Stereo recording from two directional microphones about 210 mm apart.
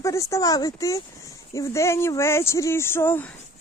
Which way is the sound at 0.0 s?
15° left (ahead or behind).